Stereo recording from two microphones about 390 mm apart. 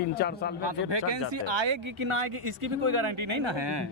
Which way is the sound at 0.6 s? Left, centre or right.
Right.